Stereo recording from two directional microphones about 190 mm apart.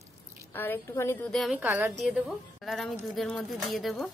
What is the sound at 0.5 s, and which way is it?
Speech, 10° left (ahead or behind).